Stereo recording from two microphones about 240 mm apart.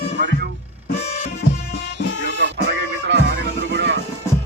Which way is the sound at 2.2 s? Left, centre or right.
Right.